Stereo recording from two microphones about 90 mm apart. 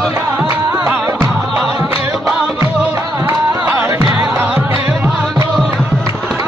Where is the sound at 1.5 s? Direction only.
Centre (ahead or behind).